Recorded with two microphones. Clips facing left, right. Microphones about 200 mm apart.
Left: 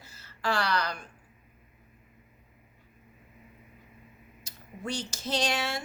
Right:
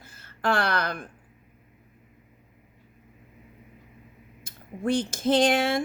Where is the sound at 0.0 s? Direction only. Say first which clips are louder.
Right 5 dB; 55° right (ahead or behind).